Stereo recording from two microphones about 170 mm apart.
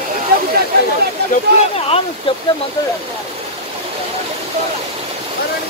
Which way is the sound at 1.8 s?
35° left (ahead or behind).